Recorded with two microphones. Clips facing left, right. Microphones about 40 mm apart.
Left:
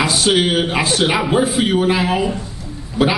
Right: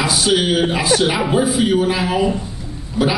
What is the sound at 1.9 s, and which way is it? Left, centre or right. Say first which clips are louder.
Speech: left 2 dB; left.